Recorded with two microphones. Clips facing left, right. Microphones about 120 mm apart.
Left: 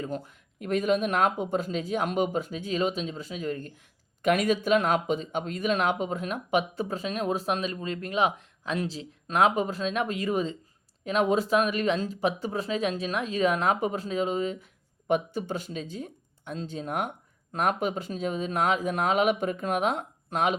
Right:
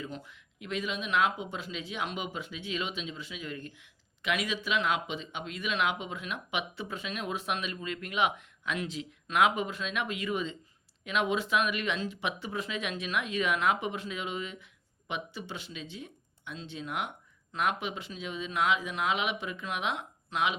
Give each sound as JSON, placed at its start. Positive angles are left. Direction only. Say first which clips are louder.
{"t": 0.0, "sound": "speech", "louder": "left 7 dB", "side_deg": 45}